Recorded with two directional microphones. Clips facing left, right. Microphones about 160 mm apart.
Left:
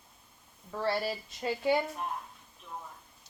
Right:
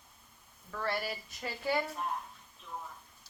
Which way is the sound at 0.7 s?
30° left (ahead or behind).